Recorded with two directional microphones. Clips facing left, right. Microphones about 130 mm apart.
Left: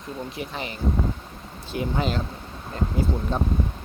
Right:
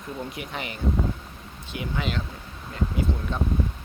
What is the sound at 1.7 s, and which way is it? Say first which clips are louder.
Speech: left 4 dB; 35° left (ahead or behind).